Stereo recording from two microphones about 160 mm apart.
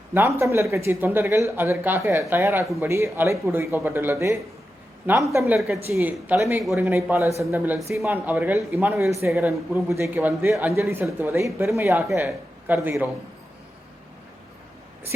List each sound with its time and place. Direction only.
0.1 s speech: 15° right (ahead or behind)